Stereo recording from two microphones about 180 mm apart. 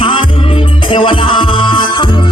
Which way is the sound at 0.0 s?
30° left (ahead or behind).